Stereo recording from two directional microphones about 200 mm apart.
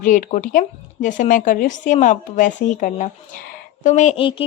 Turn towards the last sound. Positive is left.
turn(degrees=25)  # may be behind; listen again after turning